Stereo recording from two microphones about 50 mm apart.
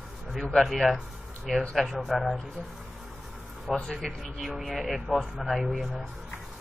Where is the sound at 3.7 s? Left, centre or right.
Centre.